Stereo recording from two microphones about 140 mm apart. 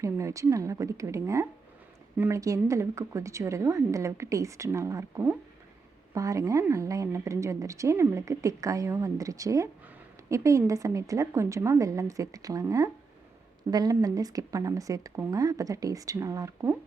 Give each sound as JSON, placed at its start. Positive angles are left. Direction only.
{"t": 0.0, "sound": "a woman's voice", "side_deg": -20}